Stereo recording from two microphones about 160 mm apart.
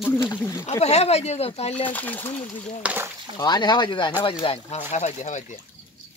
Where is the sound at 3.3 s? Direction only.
25° left (ahead or behind).